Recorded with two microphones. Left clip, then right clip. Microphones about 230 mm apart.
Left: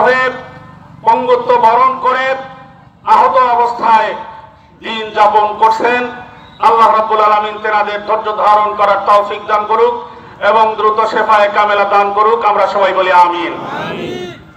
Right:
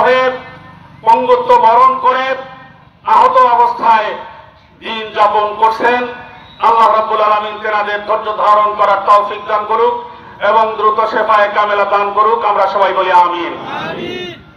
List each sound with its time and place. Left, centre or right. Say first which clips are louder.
0.0 s a man's voice: even; left
14.0 s crowd: even; centre